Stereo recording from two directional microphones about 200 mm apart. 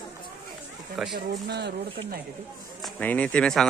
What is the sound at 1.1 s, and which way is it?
Speech, 55° right (ahead or behind).